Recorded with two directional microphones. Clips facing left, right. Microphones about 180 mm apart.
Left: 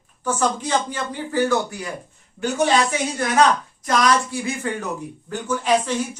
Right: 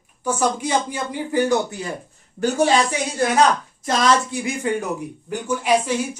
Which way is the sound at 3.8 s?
25° right (ahead or behind).